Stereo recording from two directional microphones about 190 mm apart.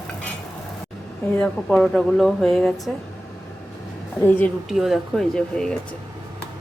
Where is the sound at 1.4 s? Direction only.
5° left (ahead or behind).